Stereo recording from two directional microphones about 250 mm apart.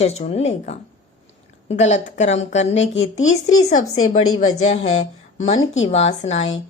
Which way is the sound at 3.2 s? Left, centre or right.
Left.